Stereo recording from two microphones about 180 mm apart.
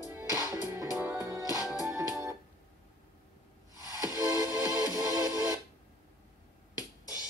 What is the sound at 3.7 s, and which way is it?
Music, 20° left (ahead or behind).